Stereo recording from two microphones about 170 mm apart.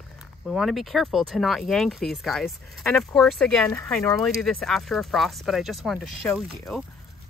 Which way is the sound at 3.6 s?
15° left (ahead or behind).